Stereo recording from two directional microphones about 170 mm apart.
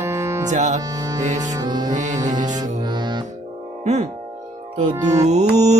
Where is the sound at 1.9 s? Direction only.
45° right (ahead or behind).